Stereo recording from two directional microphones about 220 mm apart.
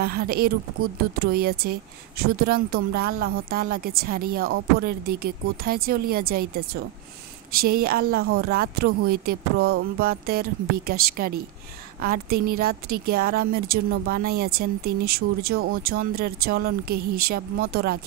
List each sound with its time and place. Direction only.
0.0 s a woman's voice: 45° right (ahead or behind)